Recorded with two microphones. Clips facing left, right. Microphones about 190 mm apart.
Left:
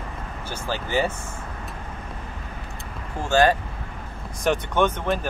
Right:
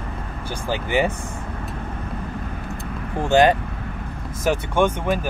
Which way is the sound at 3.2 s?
20° right (ahead or behind).